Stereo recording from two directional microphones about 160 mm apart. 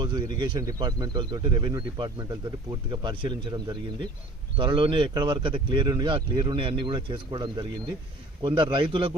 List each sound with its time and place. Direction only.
0.0 s bird: 30° right (ahead or behind)
0.3 s speech: 30° right (ahead or behind)